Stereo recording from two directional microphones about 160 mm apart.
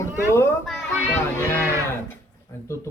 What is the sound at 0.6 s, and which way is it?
Speech, centre (ahead or behind).